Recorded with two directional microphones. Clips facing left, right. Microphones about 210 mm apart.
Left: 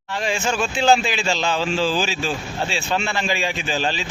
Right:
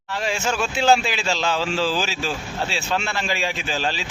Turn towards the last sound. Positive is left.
turn(degrees=0)  # may be behind; listen again after turning